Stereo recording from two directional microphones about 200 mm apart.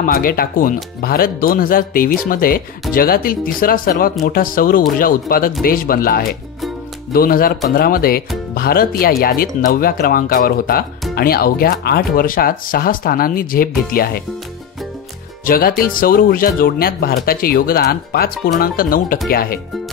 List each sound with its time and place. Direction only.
0.0 s speech: 45° left (ahead or behind)
15.4 s speech: 45° left (ahead or behind)